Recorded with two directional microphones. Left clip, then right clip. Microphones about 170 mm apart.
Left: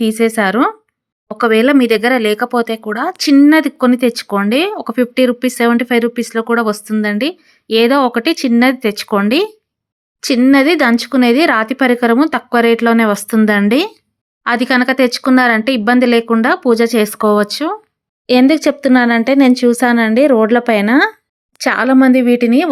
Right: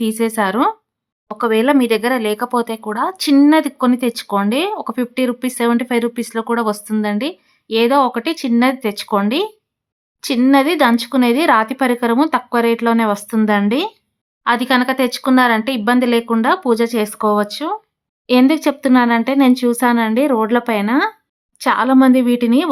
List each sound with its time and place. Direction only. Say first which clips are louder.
0.0 s speech: left 4 dB; 10° left (ahead or behind)